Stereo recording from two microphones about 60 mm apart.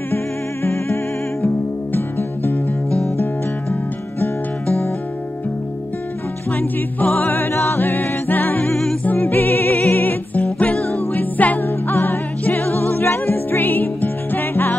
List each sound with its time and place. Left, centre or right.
1.4 s music: left
6.5 s music: left